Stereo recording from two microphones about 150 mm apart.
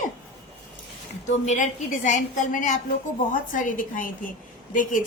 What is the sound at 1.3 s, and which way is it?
A woman's voice, 55° left (ahead or behind).